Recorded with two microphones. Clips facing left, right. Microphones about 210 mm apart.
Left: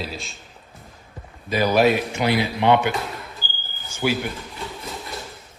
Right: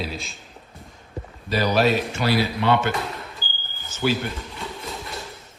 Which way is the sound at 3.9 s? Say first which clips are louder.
Even; 10° left (ahead or behind).